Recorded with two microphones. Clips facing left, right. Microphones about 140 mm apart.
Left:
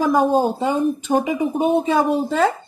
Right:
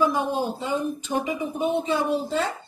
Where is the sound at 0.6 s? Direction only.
50° left (ahead or behind).